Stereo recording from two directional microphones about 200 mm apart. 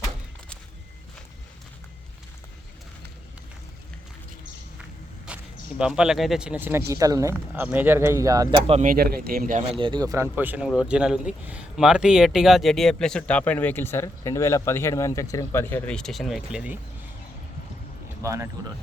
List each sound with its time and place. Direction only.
5.2 s speech: 5° right (ahead or behind); by 8.8 s 25° right (ahead or behind)
8.8 s a man's voice: 45° right (ahead or behind)
9.7 s speech: 25° right (ahead or behind); by 16.7 s 5° right (ahead or behind)
18.2 s speech: 15° right (ahead or behind)